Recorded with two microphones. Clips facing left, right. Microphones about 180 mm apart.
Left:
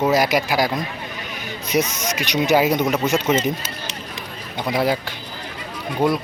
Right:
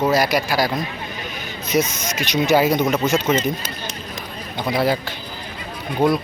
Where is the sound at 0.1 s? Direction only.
20° left (ahead or behind).